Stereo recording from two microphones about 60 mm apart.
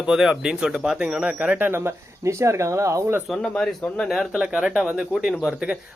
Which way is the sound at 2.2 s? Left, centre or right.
Right.